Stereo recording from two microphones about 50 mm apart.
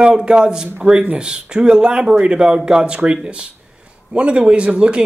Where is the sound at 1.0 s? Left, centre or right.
Right.